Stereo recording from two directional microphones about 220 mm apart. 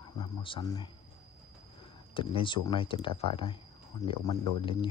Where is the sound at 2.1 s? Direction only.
25° left (ahead or behind).